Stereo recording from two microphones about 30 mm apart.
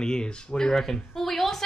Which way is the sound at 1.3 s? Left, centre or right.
Centre.